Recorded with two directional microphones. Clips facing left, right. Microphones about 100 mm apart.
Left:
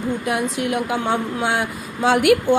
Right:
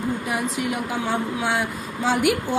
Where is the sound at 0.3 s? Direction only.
90° left.